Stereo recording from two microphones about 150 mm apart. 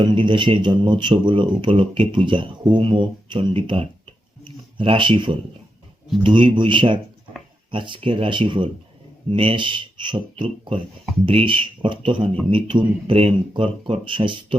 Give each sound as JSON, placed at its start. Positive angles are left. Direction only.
{"t": 0.0, "sound": "speech", "side_deg": -30}
{"t": 4.4, "sound": "a sound", "side_deg": -35}
{"t": 6.2, "sound": "speech", "side_deg": -35}